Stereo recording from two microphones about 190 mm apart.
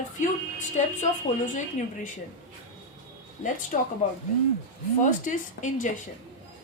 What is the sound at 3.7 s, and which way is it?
Speech, 40° left (ahead or behind).